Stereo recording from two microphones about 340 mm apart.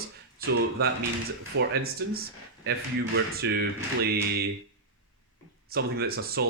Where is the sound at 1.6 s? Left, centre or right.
Right.